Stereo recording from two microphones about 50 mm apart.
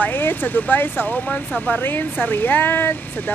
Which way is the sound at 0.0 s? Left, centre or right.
Left.